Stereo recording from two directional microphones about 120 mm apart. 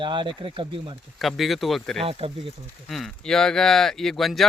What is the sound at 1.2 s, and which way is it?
Speech, centre (ahead or behind).